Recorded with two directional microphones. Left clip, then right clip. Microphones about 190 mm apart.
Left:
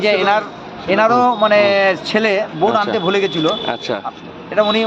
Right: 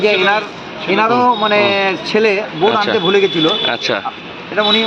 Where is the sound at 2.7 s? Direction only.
15° left (ahead or behind).